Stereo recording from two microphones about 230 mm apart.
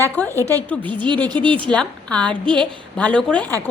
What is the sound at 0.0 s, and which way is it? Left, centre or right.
Speech, centre.